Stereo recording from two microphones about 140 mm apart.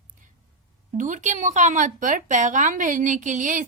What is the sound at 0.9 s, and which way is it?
Speech, 65° right (ahead or behind).